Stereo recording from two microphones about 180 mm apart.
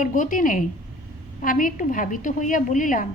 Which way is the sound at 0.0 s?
45° left (ahead or behind).